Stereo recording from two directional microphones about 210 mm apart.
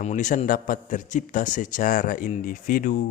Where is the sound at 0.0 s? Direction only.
35° left (ahead or behind).